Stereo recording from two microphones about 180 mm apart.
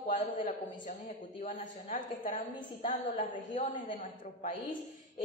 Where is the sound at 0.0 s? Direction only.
45° left (ahead or behind).